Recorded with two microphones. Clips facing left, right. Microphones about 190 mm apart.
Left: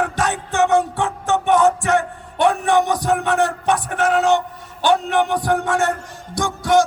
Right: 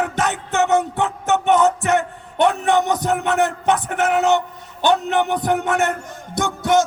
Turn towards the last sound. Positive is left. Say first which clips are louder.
# left 1 dB
turn(degrees=-20)  # may be behind; listen again after turning